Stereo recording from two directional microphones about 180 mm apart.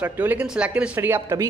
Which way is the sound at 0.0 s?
10° right (ahead or behind).